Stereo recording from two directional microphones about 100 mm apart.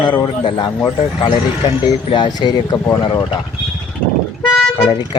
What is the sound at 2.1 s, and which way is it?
Speech, 45° left (ahead or behind).